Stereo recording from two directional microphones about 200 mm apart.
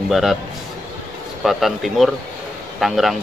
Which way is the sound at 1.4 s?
Centre (ahead or behind).